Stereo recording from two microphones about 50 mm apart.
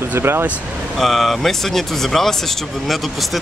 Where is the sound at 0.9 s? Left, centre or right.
Centre.